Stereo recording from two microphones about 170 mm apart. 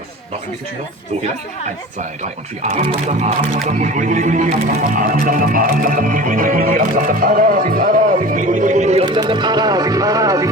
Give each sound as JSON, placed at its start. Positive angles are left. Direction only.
{"t": 2.6, "sound": "speech", "side_deg": -40}
{"t": 3.7, "sound": "music", "side_deg": -45}
{"t": 9.0, "sound": "speech", "side_deg": -30}